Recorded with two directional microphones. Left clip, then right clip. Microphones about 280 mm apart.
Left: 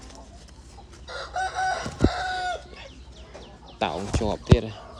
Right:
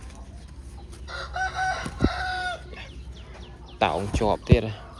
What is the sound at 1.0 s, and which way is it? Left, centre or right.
Chicken, left.